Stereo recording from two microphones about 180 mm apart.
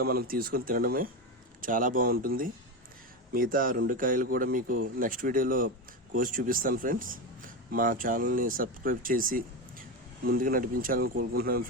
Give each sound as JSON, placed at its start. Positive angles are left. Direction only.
{"t": 0.0, "sound": "speech", "side_deg": -55}